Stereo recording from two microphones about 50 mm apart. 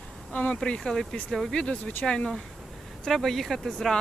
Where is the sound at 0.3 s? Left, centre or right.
Left.